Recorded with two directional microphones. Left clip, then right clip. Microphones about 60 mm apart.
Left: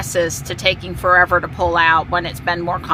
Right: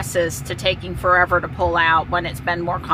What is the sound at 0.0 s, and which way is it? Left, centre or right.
Speech, left.